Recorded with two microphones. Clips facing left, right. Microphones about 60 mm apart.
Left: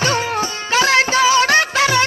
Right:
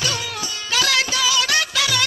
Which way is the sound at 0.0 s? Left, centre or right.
Left.